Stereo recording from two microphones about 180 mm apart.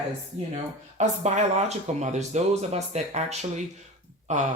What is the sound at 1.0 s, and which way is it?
Speech, 40° right (ahead or behind).